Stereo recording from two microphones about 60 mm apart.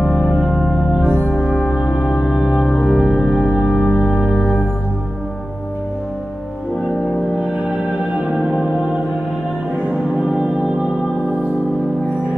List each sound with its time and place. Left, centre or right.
0.0 s organ: centre
1.3 s music: centre
10.1 s music: centre